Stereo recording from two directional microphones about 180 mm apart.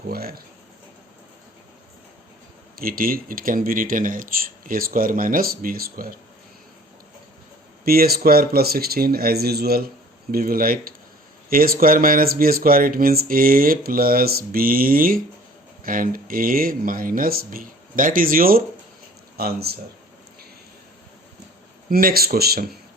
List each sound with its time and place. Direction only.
0.1 s speech: 60° right (ahead or behind)
2.7 s speech: 55° right (ahead or behind)
7.9 s speech: 55° right (ahead or behind)
21.8 s speech: 55° right (ahead or behind)